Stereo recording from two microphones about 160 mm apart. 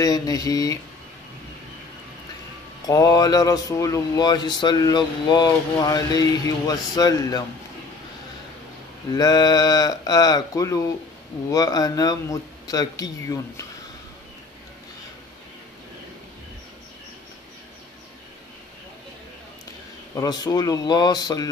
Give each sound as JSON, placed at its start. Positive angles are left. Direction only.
{"t": 0.0, "sound": "speech", "side_deg": 25}
{"t": 2.9, "sound": "speech", "side_deg": 20}
{"t": 9.1, "sound": "speech", "side_deg": 25}
{"t": 20.2, "sound": "speech", "side_deg": 25}